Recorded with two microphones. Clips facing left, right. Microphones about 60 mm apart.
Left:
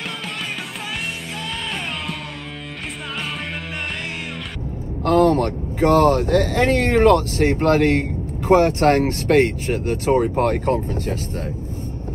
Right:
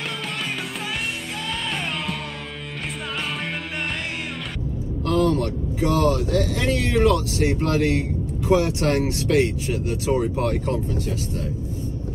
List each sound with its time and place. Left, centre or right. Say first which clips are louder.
5.0 s speech: left 5 dB; left